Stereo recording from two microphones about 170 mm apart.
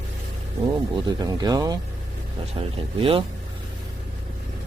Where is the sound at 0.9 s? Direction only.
25° right (ahead or behind).